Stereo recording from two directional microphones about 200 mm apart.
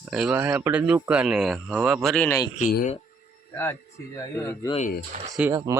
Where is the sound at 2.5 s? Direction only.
40° left (ahead or behind).